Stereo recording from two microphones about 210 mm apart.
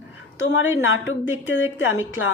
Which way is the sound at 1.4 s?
65° left (ahead or behind).